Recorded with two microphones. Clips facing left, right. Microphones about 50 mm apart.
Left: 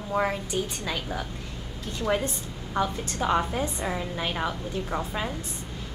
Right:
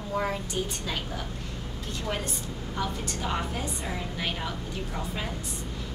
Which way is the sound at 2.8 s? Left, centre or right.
Left.